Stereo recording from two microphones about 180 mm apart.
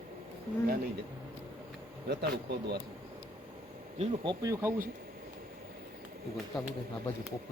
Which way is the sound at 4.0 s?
35° right (ahead or behind).